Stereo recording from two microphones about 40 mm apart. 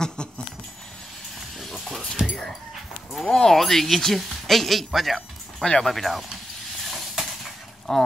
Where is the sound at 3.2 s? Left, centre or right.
Centre.